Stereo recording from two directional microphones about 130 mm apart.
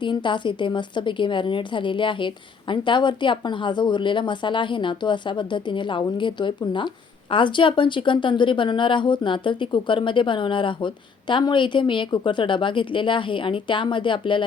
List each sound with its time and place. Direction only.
0.0 s a woman's voice: 40° left (ahead or behind)